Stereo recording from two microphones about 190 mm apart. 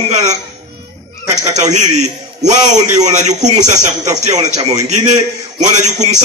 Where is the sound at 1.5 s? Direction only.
40° right (ahead or behind).